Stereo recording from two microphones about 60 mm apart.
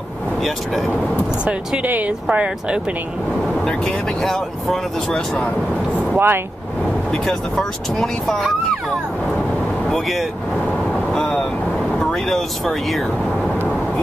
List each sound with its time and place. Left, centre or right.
1.8 s speech: right
3.4 s speech: centre
6.1 s speech: right
7.2 s speech: centre
9.8 s speech: centre
11.1 s boat: centre
12.0 s speech: centre